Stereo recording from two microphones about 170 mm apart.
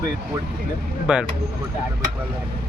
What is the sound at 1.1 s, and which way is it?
Speech, 5° right (ahead or behind).